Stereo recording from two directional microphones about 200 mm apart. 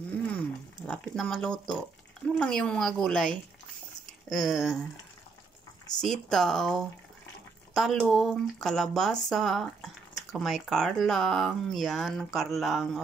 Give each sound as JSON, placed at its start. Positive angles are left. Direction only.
{"t": 0.8, "sound": "speech", "side_deg": 0}
{"t": 5.9, "sound": "speech", "side_deg": 0}